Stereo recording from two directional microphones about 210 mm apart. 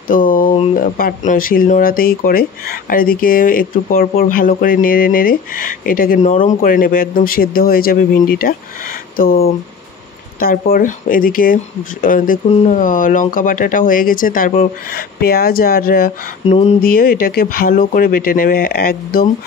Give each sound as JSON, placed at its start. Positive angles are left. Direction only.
{"t": 0.1, "sound": "a sound", "side_deg": 40}
{"t": 0.7, "sound": "speech", "side_deg": 45}
{"t": 16.4, "sound": "speech", "side_deg": 30}
{"t": 16.9, "sound": "speech", "side_deg": 45}